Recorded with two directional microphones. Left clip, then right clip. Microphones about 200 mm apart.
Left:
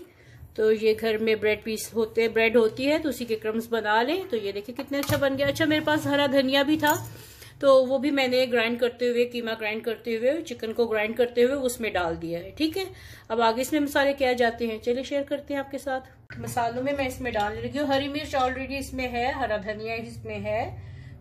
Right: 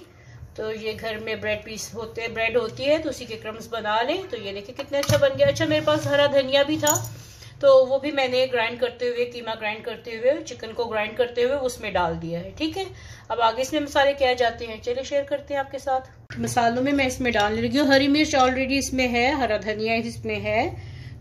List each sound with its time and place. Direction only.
0.6 s a woman's voice: 45° left (ahead or behind)
16.5 s a woman's voice: 25° right (ahead or behind)
17.4 s a woman's voice: 40° right (ahead or behind)